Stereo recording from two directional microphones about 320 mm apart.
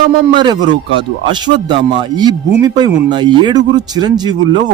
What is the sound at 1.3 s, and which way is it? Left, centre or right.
A man's voice, centre.